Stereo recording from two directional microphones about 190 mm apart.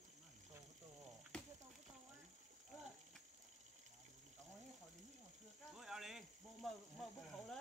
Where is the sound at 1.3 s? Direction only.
5° left (ahead or behind).